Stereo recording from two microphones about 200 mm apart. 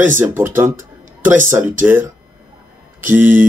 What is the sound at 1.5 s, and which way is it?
Speech, 10° right (ahead or behind).